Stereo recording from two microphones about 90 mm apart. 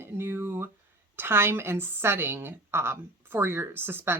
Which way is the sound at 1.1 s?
25° right (ahead or behind).